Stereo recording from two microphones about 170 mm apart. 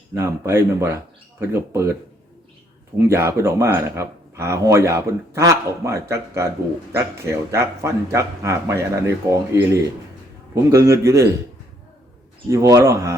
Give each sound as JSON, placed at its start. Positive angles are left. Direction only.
{"t": 0.1, "sound": "speech", "side_deg": -15}
{"t": 3.0, "sound": "speech", "side_deg": -15}
{"t": 12.5, "sound": "speech", "side_deg": -20}